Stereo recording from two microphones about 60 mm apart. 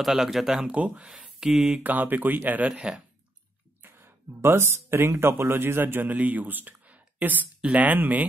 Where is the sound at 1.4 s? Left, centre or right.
Centre.